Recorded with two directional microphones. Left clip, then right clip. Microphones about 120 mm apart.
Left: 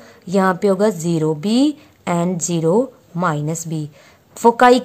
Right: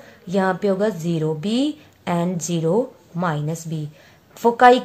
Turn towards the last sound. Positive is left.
turn(degrees=55)  # may be behind; listen again after turning